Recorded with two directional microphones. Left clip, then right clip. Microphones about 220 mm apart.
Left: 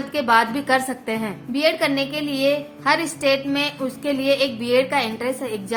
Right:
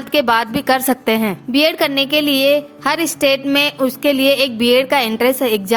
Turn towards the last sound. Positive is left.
turn(degrees=-40)  # may be behind; listen again after turning